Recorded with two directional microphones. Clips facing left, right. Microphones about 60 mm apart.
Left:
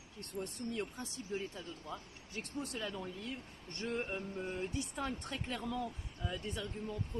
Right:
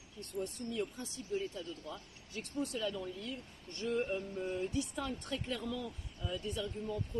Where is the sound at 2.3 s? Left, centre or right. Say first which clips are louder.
Right 3 dB; left.